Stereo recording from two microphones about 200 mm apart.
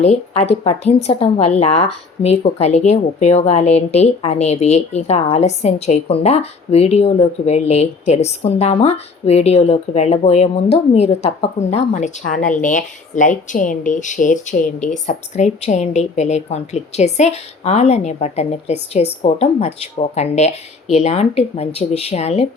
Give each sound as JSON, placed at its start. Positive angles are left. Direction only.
{"t": 0.0, "sound": "a woman's voice", "side_deg": 35}
{"t": 14.8, "sound": "a woman's voice", "side_deg": 5}
{"t": 15.0, "sound": "a woman's voice", "side_deg": 35}